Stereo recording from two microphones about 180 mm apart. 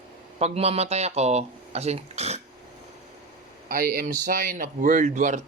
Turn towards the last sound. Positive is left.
turn(degrees=-45)  # may be behind; listen again after turning